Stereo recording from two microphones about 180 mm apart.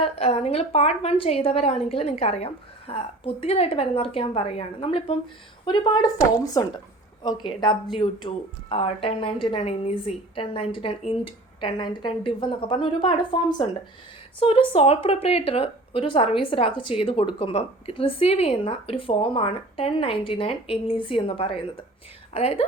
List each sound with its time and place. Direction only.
0.0 s a woman's voice: 35° left (ahead or behind)